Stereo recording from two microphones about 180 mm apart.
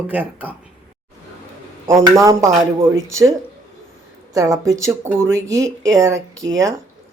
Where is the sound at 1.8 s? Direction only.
15° right (ahead or behind).